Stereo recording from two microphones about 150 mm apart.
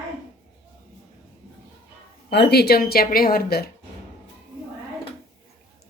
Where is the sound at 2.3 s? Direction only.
90° left.